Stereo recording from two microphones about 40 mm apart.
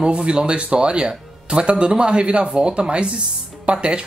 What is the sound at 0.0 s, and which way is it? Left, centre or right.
Speech, right.